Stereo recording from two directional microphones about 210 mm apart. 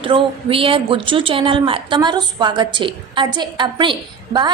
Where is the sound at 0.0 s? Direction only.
25° right (ahead or behind).